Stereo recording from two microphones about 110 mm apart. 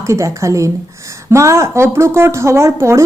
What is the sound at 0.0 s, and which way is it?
A woman's voice, 25° right (ahead or behind).